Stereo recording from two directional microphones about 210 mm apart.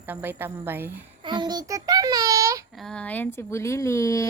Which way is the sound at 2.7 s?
Centre (ahead or behind).